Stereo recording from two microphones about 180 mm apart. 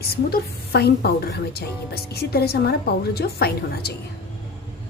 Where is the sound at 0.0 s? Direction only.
60° left (ahead or behind).